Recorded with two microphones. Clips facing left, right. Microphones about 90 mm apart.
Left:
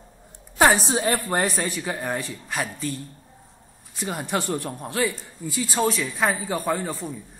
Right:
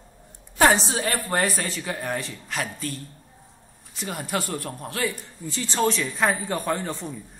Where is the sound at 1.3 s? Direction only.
25° left (ahead or behind).